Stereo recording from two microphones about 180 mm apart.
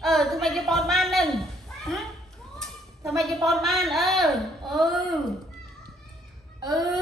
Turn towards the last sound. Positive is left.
turn(degrees=-20)  # may be behind; listen again after turning